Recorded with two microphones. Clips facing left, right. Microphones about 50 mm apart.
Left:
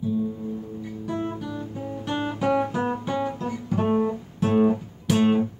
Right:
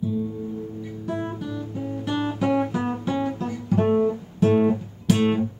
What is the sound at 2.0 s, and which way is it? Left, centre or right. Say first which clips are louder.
Guitar: right 1 dB; centre.